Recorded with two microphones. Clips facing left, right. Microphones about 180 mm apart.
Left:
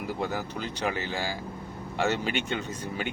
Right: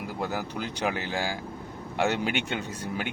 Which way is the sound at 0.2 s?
10° right (ahead or behind).